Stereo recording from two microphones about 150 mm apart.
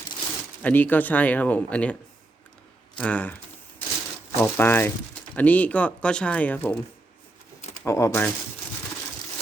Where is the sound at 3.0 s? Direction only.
10° left (ahead or behind).